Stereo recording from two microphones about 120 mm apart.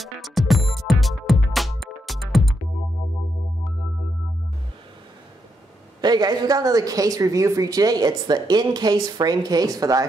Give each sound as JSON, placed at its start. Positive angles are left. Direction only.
{"t": 0.0, "sound": "music", "side_deg": 0}
{"t": 5.9, "sound": "a woman's voice", "side_deg": -35}